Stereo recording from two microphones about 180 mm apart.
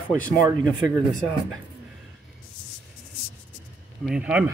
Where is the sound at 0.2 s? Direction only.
5° left (ahead or behind).